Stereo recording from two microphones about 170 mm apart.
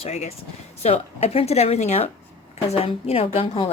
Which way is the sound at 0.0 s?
40° left (ahead or behind).